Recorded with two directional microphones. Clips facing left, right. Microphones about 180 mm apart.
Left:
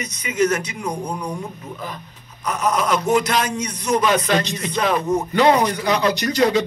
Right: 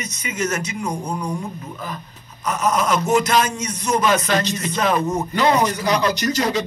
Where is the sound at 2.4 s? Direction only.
45° right (ahead or behind).